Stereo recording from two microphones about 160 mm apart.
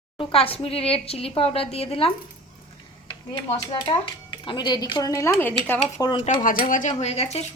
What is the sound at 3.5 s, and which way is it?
Speech, 25° left (ahead or behind).